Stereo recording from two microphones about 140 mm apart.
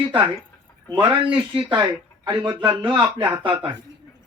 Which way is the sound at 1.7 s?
35° right (ahead or behind).